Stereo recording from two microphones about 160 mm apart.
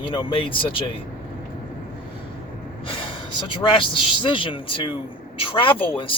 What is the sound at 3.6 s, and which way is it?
Speech, 30° left (ahead or behind).